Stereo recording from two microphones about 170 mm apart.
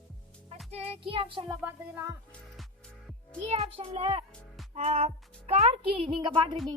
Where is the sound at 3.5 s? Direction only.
35° right (ahead or behind).